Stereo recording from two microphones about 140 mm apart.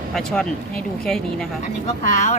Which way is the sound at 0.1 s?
5° left (ahead or behind).